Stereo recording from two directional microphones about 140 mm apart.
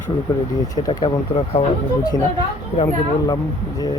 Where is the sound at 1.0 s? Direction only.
45° left (ahead or behind).